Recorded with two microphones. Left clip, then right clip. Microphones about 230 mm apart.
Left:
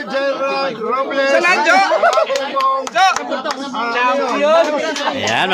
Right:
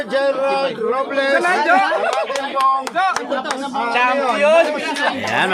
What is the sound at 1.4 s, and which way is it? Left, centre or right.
Speech, left.